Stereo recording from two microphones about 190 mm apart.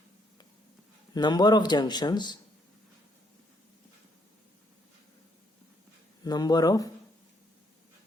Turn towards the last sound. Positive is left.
turn(degrees=20)  # may be behind; listen again after turning